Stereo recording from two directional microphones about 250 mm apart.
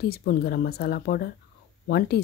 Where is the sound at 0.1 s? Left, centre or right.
Left.